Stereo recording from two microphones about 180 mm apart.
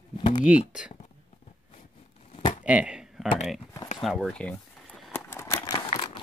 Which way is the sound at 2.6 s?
5° right (ahead or behind).